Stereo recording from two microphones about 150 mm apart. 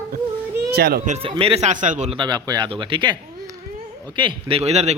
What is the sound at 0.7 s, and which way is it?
Speech, 90° right.